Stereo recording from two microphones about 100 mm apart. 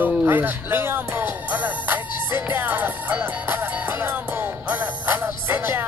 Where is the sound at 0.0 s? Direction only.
20° right (ahead or behind).